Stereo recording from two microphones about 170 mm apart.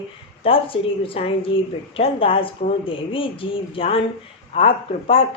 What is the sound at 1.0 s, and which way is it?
Speech, 35° left (ahead or behind).